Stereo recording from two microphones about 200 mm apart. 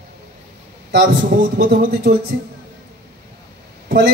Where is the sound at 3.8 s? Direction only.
55° right (ahead or behind).